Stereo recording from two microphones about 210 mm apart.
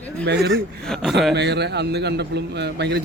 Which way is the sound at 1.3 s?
55° right (ahead or behind).